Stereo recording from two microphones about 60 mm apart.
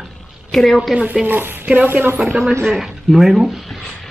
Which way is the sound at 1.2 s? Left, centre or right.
Right.